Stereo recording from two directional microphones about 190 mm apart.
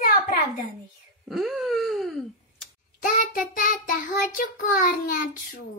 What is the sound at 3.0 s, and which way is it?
Child singing, 45° left (ahead or behind).